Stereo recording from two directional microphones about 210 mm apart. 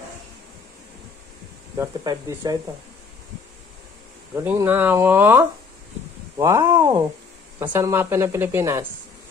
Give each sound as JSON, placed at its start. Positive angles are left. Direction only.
{"t": 1.8, "sound": "a woman's voice", "side_deg": -15}
{"t": 4.5, "sound": "a woman's voice", "side_deg": -10}